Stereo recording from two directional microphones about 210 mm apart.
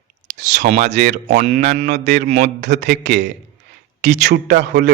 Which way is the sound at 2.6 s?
55° right (ahead or behind).